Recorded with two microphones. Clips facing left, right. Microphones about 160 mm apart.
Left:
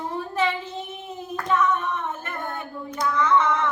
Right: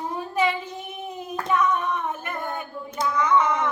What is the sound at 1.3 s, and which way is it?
Female singing, 15° right (ahead or behind).